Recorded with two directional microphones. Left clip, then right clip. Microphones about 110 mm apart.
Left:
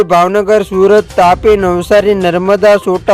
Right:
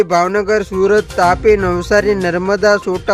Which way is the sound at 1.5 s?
25° left (ahead or behind).